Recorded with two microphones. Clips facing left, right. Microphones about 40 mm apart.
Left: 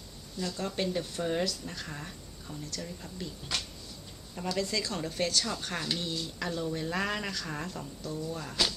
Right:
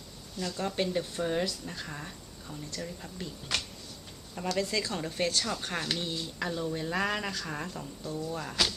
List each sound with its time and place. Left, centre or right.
0.4 s a woman's voice: centre
4.5 s a woman's voice: centre
8.0 s a woman's voice: centre